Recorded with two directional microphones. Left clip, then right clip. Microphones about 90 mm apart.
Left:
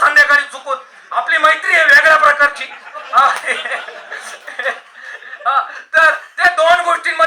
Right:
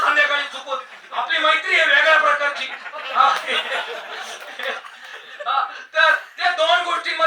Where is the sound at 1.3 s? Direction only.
30° left (ahead or behind).